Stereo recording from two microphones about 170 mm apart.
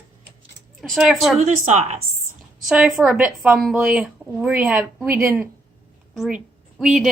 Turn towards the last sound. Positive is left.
turn(degrees=0)  # may be behind; listen again after turning